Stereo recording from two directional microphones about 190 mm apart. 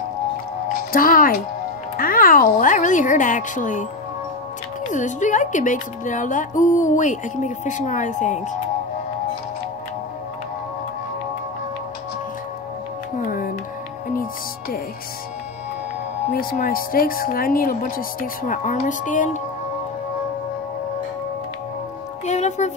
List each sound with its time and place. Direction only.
0.9 s a woman's voice: 45° left (ahead or behind)
4.8 s a woman's voice: 40° left (ahead or behind)
16.3 s speech: 50° left (ahead or behind)
22.2 s music: 35° left (ahead or behind)